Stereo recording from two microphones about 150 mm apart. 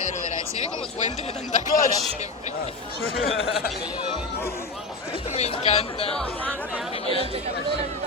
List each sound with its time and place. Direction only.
1.5 s speech: 60° left (ahead or behind)
5.4 s speech: 45° left (ahead or behind)